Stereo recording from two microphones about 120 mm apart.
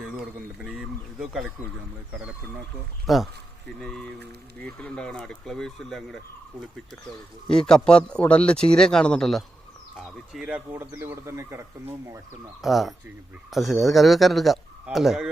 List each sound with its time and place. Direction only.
0.6 s a sound: 5° right (ahead or behind)
3.1 s speech: centre (ahead or behind)
7.4 s speech: 5° left (ahead or behind)
10.3 s speech: 10° right (ahead or behind)
12.6 s speech: centre (ahead or behind)